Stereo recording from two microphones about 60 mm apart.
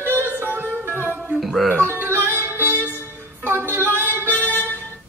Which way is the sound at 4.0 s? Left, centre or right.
Right.